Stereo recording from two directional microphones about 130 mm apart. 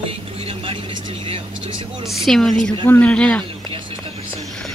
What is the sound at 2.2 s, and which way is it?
Speech, centre (ahead or behind).